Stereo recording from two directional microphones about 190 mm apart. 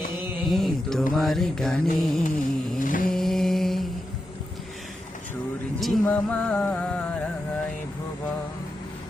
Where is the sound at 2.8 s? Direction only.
45° left (ahead or behind).